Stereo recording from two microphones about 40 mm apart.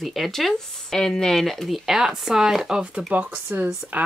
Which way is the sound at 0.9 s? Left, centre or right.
Centre.